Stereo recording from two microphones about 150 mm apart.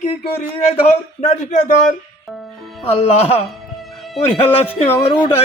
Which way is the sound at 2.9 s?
40° left (ahead or behind).